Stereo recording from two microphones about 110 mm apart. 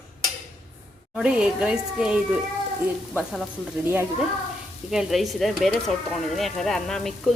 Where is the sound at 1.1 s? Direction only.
5° right (ahead or behind).